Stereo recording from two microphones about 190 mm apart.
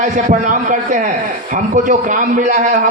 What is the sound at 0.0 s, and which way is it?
A man's voice, 45° right (ahead or behind).